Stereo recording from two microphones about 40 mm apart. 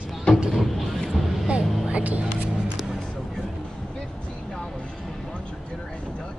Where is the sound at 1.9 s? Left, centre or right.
Right.